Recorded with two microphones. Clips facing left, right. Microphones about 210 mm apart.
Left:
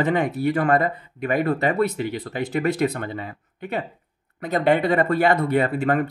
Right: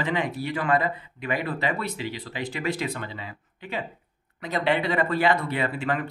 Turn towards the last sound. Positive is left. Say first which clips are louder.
# left 7 dB
turn(degrees=45)  # may be behind; listen again after turning